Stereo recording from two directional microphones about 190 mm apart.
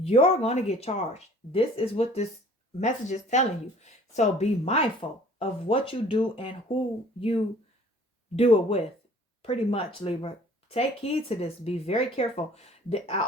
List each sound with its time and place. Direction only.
0.0 s speech: 30° left (ahead or behind)